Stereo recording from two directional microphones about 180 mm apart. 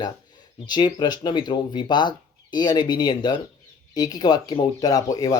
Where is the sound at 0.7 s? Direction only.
25° left (ahead or behind).